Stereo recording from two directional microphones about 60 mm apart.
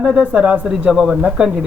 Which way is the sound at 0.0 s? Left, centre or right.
Centre.